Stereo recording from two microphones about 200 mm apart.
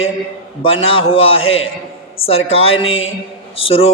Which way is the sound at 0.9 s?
30° left (ahead or behind).